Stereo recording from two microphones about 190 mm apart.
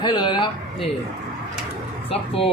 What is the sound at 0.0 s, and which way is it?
Speech, 25° left (ahead or behind).